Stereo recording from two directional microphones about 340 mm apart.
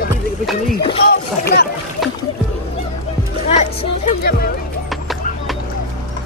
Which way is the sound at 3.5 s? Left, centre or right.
Left.